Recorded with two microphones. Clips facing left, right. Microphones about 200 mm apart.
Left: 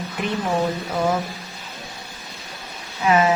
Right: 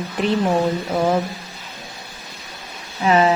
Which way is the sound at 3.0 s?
30° right (ahead or behind).